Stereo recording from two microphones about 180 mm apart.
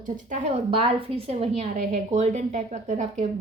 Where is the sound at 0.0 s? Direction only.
45° right (ahead or behind).